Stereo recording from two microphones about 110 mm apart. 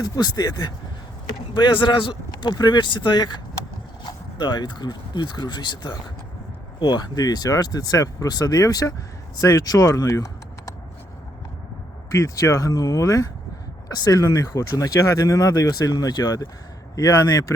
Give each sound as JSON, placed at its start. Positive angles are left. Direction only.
{"t": 0.2, "sound": "speech", "side_deg": 35}
{"t": 12.1, "sound": "speech", "side_deg": 30}